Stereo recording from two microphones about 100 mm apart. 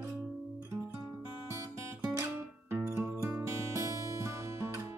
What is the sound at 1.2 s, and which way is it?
Music, 25° right (ahead or behind).